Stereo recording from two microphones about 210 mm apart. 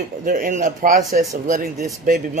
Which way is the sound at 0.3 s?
40° right (ahead or behind).